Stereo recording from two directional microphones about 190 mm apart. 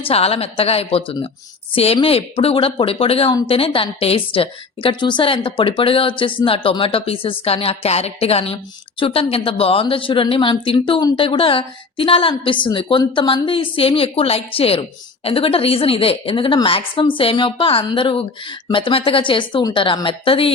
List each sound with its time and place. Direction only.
0.0 s a woman's voice: 30° left (ahead or behind)